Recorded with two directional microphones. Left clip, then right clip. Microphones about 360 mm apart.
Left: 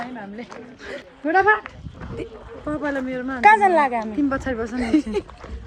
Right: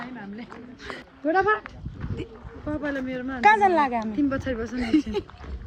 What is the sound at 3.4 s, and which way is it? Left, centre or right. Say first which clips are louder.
Speech: left 4 dB; centre.